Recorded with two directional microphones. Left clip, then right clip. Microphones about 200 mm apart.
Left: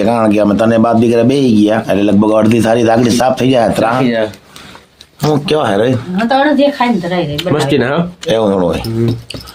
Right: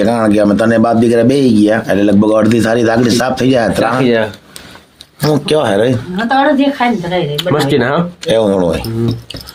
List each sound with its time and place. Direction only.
0.0 s speech: centre (ahead or behind)
4.0 s speech: 40° right (ahead or behind)
5.2 s speech: 10° right (ahead or behind)
6.2 s speech: 50° left (ahead or behind)
7.3 s speech: centre (ahead or behind)